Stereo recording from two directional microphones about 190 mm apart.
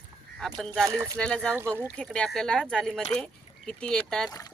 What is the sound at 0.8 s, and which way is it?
Speech, 15° right (ahead or behind).